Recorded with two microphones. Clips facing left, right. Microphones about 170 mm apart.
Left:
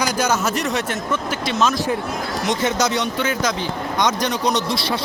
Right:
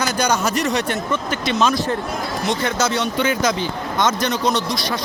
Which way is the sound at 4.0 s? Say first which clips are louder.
Right 1 dB; 15° left (ahead or behind).